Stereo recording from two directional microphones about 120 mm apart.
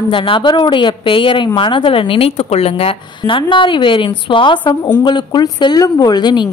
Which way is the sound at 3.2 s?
45° left (ahead or behind).